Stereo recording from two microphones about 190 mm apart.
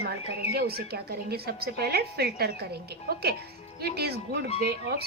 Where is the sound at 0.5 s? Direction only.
55° right (ahead or behind).